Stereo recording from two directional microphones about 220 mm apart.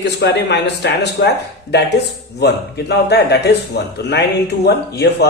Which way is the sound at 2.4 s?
50° left (ahead or behind).